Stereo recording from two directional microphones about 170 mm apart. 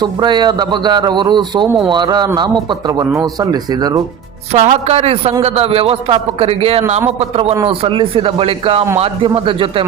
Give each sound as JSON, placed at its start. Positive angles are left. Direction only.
{"t": 0.0, "sound": "a man's voice", "side_deg": -25}
{"t": 4.5, "sound": "a man's voice", "side_deg": -40}